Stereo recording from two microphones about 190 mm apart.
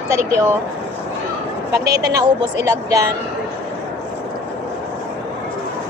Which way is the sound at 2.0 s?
20° right (ahead or behind).